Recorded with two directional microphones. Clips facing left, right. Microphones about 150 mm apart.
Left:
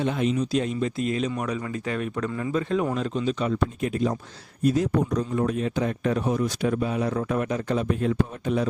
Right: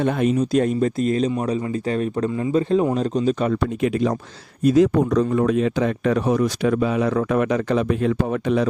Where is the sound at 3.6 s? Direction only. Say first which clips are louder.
Right 5 dB; 90° right.